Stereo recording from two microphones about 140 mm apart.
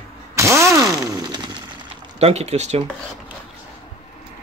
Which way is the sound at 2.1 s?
50° right (ahead or behind).